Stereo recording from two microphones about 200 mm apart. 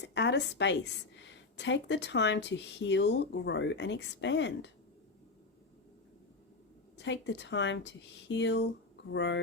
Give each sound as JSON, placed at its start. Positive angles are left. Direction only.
{"t": 0.0, "sound": "a woman's voice", "side_deg": 60}
{"t": 7.0, "sound": "a woman's voice", "side_deg": 65}